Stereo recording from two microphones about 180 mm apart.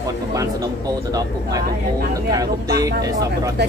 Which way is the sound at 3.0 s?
20° right (ahead or behind).